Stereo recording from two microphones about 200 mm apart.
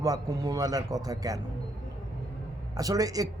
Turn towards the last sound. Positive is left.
turn(degrees=-15)  # may be behind; listen again after turning